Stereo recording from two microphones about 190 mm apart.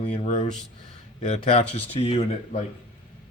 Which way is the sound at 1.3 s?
30° left (ahead or behind).